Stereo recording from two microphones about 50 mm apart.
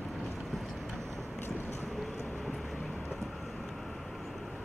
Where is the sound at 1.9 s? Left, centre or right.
Centre.